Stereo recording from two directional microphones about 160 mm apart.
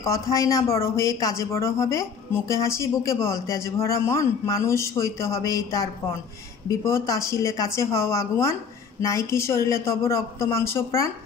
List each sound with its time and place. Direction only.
0.0 s speech: 20° left (ahead or behind)